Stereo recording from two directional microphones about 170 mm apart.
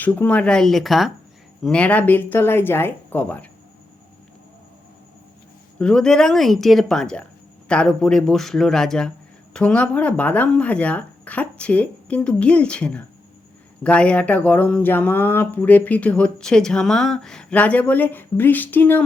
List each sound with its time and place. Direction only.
0.0 s speech: 10° left (ahead or behind)
5.8 s speech: 5° left (ahead or behind)